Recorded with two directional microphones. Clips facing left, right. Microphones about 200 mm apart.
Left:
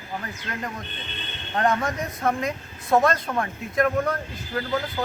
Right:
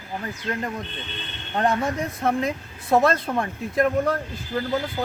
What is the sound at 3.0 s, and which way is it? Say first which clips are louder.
Speech: right 1 dB; 30° right (ahead or behind).